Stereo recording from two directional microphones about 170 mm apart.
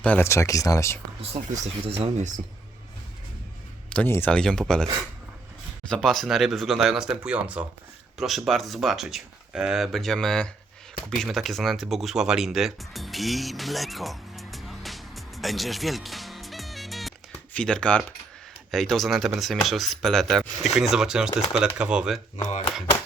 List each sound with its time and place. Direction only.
0.0 s speech: 10° left (ahead or behind)
1.6 s speech: 35° right (ahead or behind)
2.1 s speech: 45° right (ahead or behind)
3.8 s speech: 10° left (ahead or behind)
5.9 s speech: centre (ahead or behind)
22.4 s speech: 45° left (ahead or behind)